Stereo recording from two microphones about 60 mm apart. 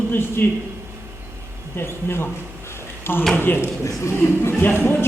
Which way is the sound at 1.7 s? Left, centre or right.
Left.